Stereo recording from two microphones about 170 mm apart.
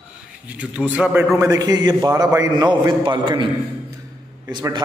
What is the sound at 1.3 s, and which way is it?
A man's voice, 20° right (ahead or behind).